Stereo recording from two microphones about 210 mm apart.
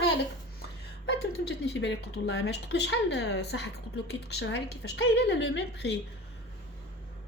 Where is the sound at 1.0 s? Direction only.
55° left (ahead or behind).